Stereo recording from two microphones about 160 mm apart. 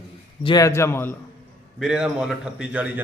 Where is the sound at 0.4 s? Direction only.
25° left (ahead or behind).